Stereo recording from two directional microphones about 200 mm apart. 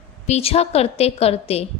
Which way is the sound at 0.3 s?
30° left (ahead or behind).